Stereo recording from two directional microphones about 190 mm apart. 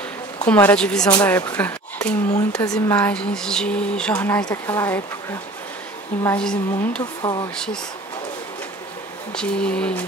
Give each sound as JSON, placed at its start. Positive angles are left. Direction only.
{"t": 0.4, "sound": "speech", "side_deg": 10}
{"t": 6.2, "sound": "a woman's voice", "side_deg": 5}
{"t": 7.2, "sound": "speech", "side_deg": 20}
{"t": 7.5, "sound": "a woman's voice", "side_deg": 5}
{"t": 9.3, "sound": "a woman's voice", "side_deg": 5}